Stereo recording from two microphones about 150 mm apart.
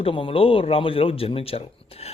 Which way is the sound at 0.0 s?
35° left (ahead or behind).